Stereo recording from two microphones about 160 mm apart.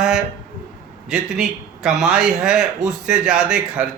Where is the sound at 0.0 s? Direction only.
5° right (ahead or behind).